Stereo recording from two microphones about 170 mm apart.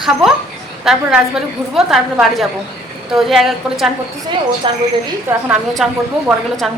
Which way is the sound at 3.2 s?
Centre (ahead or behind).